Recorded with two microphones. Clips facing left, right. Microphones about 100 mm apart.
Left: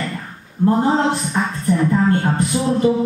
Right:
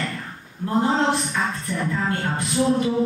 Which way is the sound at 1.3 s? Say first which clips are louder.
Left 6 dB; 35° left (ahead or behind).